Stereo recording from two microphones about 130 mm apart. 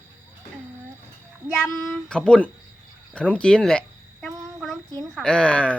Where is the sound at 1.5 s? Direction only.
5° left (ahead or behind).